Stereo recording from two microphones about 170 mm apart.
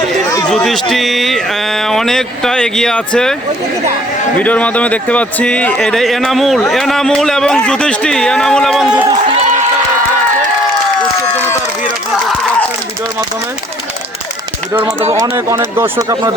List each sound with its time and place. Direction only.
0.5 s speech: centre (ahead or behind)
4.4 s speech: 10° left (ahead or behind)
9.0 s run: 35° right (ahead or behind)
14.7 s speech: 20° right (ahead or behind)